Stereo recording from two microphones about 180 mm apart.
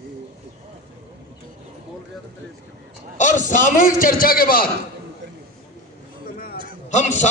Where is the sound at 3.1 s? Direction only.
45° left (ahead or behind).